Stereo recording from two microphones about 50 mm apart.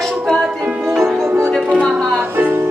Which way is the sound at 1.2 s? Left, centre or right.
Right.